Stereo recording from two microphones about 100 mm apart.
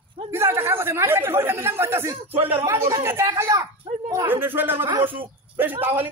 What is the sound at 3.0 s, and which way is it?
Speech, 25° right (ahead or behind).